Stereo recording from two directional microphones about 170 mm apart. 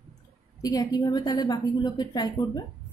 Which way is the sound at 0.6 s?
20° left (ahead or behind).